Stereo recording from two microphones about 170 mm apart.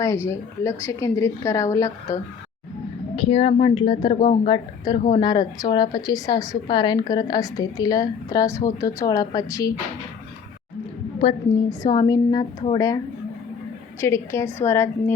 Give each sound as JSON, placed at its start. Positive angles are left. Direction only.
{"t": 0.0, "sound": "speech", "side_deg": 20}
{"t": 3.2, "sound": "a woman's voice", "side_deg": 35}
{"t": 11.7, "sound": "a woman's voice", "side_deg": 20}
{"t": 14.0, "sound": "speech", "side_deg": 15}